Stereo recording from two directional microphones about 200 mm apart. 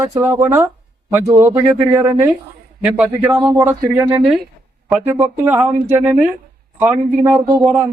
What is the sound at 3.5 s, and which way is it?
Speech, 15° right (ahead or behind).